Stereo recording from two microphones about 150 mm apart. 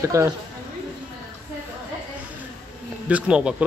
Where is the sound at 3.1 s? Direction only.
10° right (ahead or behind).